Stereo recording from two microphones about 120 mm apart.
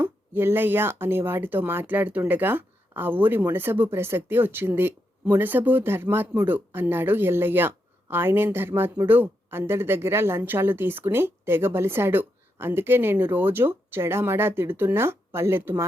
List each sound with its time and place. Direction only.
0.0 s speech: 20° right (ahead or behind)